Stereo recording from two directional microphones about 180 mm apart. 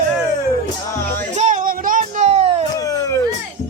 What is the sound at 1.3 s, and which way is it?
Music, 45° right (ahead or behind).